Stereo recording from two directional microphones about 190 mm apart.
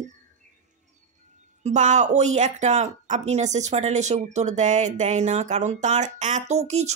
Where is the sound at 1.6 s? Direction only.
40° right (ahead or behind).